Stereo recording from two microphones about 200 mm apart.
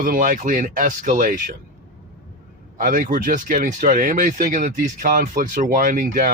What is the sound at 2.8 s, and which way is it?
Speech, 45° right (ahead or behind).